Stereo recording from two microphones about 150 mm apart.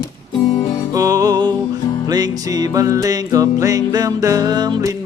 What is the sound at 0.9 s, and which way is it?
Music, 20° right (ahead or behind).